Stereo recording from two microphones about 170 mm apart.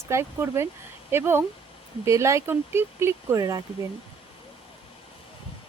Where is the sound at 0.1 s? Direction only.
15° right (ahead or behind).